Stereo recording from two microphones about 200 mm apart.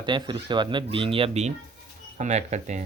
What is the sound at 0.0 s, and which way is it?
Speech, 20° right (ahead or behind).